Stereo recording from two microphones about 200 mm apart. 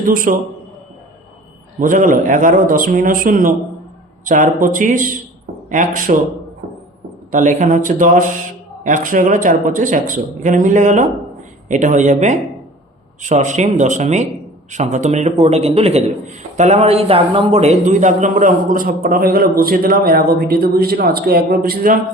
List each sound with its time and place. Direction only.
0.0 s a man's voice: 45° right (ahead or behind)
1.8 s a man's voice: 40° right (ahead or behind)
7.3 s a man's voice: 40° right (ahead or behind)